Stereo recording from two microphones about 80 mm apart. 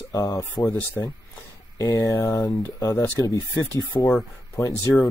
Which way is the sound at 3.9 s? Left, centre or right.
Left.